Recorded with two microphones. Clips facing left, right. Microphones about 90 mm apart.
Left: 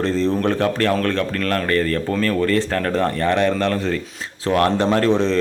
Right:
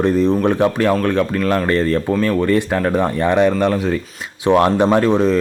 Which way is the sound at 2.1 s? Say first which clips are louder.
Right 3 dB; 10° right (ahead or behind).